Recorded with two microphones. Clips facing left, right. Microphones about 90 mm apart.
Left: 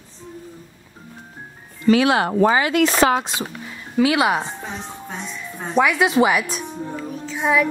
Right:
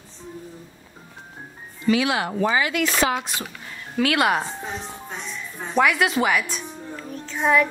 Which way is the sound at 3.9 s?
10° left (ahead or behind).